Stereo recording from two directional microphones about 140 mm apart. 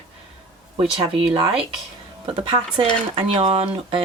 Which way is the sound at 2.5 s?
40° right (ahead or behind).